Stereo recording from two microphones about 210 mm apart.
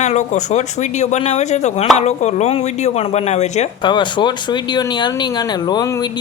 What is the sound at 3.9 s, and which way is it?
Speech, 20° left (ahead or behind).